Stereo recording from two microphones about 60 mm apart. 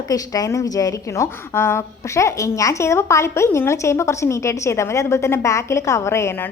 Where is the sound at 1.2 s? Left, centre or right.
Left.